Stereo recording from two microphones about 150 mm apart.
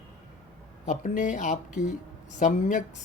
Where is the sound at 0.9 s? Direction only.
60° left (ahead or behind).